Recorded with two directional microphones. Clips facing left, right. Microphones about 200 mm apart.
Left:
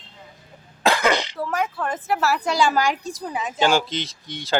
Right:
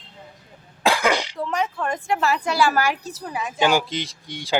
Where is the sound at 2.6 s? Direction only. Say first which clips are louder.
Even; 15° left (ahead or behind).